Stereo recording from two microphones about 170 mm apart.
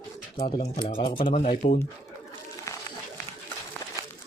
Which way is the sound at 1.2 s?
50° left (ahead or behind).